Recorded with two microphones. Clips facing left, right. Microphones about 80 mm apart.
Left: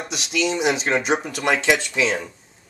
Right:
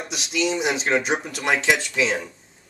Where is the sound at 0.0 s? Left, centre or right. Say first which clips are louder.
Left 1 dB; centre.